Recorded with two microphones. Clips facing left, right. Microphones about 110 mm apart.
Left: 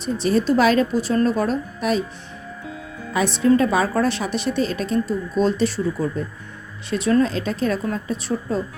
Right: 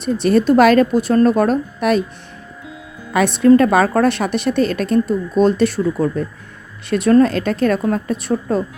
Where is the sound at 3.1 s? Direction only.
60° right (ahead or behind).